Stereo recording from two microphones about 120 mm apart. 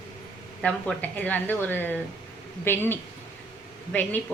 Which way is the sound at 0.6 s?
10° left (ahead or behind).